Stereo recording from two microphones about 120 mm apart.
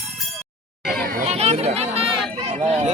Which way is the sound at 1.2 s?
60° right (ahead or behind).